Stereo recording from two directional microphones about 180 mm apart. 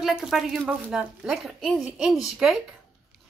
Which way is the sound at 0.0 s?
Centre (ahead or behind).